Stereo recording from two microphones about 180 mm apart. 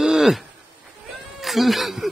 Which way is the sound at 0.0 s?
5° right (ahead or behind).